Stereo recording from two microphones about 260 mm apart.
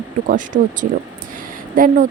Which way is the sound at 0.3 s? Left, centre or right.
Right.